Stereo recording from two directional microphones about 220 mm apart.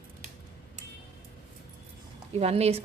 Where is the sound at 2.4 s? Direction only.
30° right (ahead or behind).